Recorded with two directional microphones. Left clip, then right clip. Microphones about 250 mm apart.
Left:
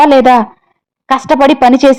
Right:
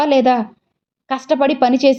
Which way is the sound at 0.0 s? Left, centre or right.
Left.